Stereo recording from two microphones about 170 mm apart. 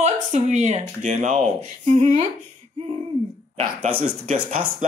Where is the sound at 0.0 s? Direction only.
45° right (ahead or behind).